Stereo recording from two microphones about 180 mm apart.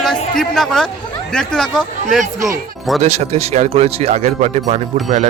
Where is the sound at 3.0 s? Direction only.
35° right (ahead or behind).